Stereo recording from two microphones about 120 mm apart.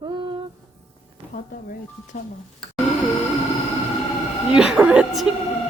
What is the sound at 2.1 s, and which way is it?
Speech, 90° left.